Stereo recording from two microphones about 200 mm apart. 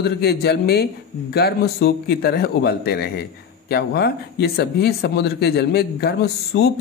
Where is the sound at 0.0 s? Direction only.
55° left (ahead or behind).